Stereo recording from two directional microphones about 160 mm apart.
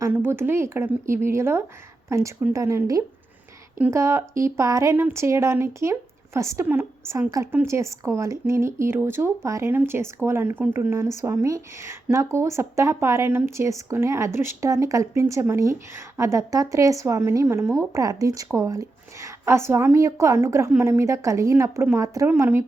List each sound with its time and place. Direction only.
0.0 s speech: 15° right (ahead or behind)